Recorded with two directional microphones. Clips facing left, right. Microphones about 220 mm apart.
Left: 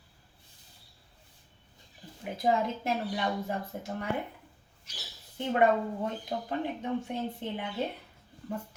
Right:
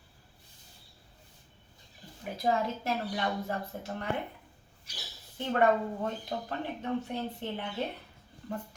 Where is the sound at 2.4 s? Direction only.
15° left (ahead or behind).